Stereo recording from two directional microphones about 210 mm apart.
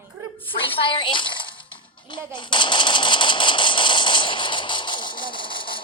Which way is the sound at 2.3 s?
20° left (ahead or behind).